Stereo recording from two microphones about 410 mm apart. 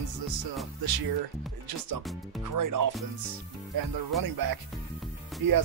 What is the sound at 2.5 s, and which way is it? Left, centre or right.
Speech, right.